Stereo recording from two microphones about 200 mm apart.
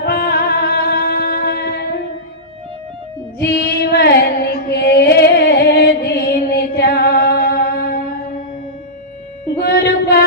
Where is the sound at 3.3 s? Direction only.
50° left (ahead or behind).